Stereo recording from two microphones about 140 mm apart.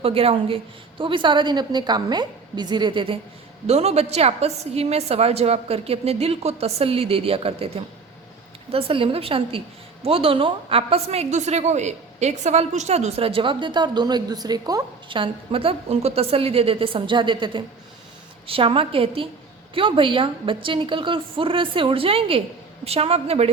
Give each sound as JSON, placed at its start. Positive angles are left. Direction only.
{"t": 0.0, "sound": "a woman's voice", "side_deg": -45}
{"t": 3.7, "sound": "a woman's voice", "side_deg": -50}
{"t": 8.7, "sound": "a woman's voice", "side_deg": -40}